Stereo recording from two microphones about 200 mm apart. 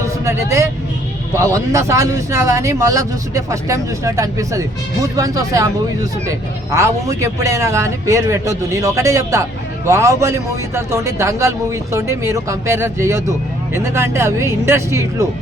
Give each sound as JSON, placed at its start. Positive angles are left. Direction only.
{"t": 0.3, "sound": "speech", "side_deg": -15}